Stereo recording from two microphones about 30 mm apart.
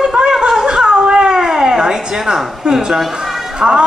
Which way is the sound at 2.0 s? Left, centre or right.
Right.